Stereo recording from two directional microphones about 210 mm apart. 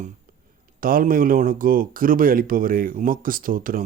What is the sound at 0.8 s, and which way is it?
Speech, 45° right (ahead or behind).